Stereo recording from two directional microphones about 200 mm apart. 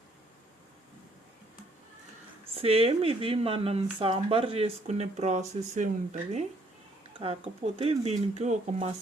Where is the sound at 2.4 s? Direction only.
30° right (ahead or behind).